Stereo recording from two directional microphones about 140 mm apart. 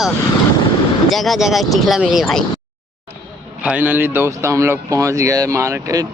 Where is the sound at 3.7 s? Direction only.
15° right (ahead or behind).